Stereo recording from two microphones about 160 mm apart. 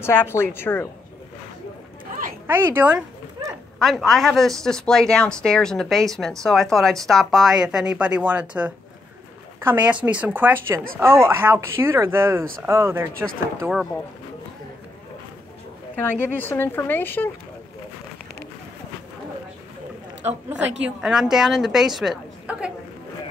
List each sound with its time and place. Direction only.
0.0 s speech: 15° left (ahead or behind)
2.4 s speech: 15° right (ahead or behind)
3.8 s speech: centre (ahead or behind); by 13.1 s 15° right (ahead or behind)
16.1 s speech: 10° left (ahead or behind)
20.2 s speech: 10° right (ahead or behind)